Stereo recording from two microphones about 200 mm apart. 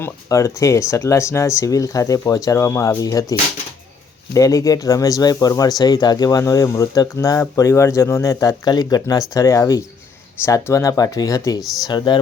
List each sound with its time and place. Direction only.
0.0 s speech: 15° left (ahead or behind)
4.4 s speech: 15° left (ahead or behind)